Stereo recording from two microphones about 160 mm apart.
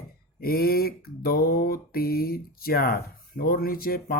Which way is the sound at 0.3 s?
70° left (ahead or behind).